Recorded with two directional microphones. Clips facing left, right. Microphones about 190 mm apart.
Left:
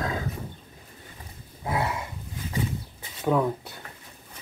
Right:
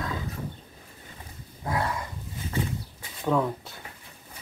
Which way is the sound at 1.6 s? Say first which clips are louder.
Left 1 dB; 5° left (ahead or behind).